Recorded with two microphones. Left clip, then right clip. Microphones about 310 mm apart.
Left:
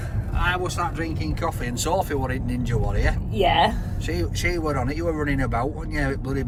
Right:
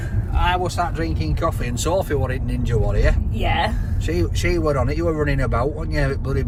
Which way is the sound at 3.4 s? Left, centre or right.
Left.